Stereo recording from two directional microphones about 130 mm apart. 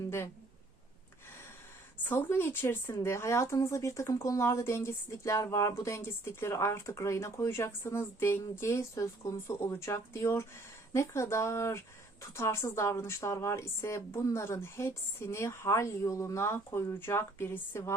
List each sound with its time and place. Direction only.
2.0 s speech: 15° left (ahead or behind)